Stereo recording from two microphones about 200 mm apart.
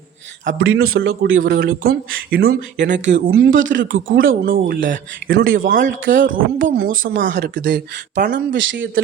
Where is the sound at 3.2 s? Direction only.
50° right (ahead or behind).